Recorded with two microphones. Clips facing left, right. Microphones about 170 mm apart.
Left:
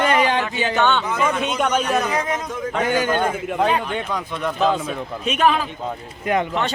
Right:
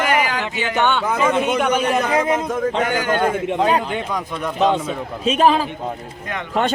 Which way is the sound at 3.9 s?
Centre (ahead or behind).